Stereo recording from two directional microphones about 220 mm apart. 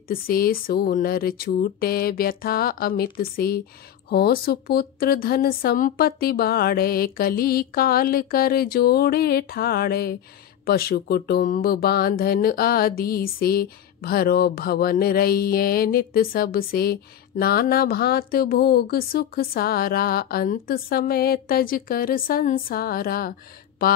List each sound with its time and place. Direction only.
0.1 s speech: 40° left (ahead or behind)